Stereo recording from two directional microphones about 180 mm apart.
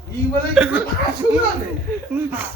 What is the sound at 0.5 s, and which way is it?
Speech, 5° right (ahead or behind).